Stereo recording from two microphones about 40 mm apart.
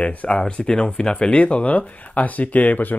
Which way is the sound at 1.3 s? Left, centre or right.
Left.